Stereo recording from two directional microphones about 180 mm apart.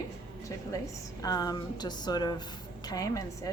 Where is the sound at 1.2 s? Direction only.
20° left (ahead or behind).